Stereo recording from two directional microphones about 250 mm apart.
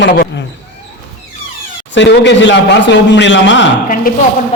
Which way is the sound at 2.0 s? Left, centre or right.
Left.